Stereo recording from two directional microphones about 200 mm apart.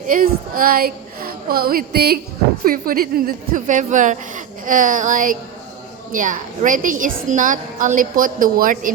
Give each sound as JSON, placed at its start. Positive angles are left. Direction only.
{"t": 0.1, "sound": "a woman's voice", "side_deg": -45}